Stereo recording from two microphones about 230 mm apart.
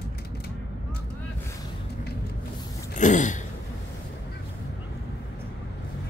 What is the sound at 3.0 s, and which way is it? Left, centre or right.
Throat clearing, left.